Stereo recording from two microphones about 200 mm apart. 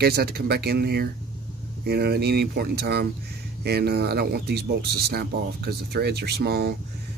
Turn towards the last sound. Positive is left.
turn(degrees=-55)  # may be behind; listen again after turning